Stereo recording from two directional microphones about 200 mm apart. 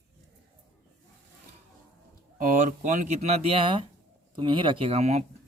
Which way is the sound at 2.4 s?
40° right (ahead or behind).